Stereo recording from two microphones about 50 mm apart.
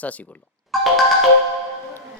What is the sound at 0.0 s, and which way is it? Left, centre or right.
Speech, left.